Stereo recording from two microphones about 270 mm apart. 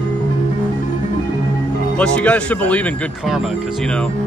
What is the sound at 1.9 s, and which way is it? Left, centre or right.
Speech, centre.